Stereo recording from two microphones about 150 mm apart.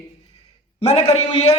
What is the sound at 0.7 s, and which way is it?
Speech, 45° left (ahead or behind).